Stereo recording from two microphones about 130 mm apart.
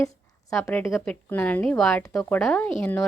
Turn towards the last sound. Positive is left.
turn(degrees=5)  # may be behind; listen again after turning